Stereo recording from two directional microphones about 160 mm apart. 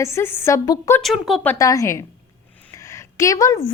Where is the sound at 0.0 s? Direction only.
15° left (ahead or behind).